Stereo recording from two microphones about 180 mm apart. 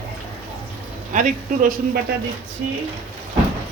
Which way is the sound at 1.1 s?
50° right (ahead or behind).